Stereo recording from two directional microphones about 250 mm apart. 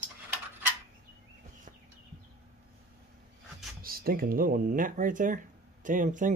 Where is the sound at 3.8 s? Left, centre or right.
Right.